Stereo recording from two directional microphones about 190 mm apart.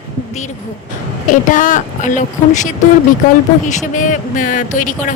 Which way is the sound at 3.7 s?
40° left (ahead or behind).